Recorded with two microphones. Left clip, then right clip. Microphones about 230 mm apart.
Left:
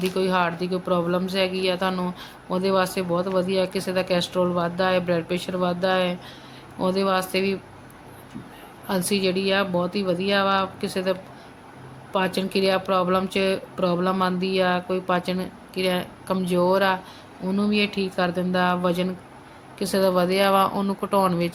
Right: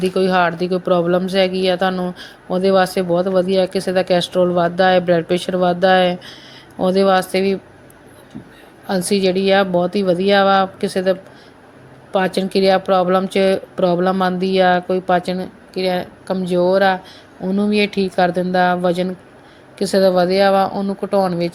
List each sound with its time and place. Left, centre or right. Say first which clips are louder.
0.0 s speech: right 7 dB; right
8.9 s speech: right 7 dB; centre